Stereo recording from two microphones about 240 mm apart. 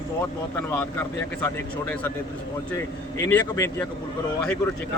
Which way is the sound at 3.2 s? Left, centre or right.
Centre.